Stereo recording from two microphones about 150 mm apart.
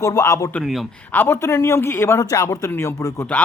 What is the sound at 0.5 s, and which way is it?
Speech, centre (ahead or behind).